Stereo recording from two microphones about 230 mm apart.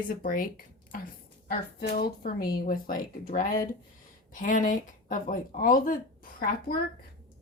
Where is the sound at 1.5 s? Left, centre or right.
Left.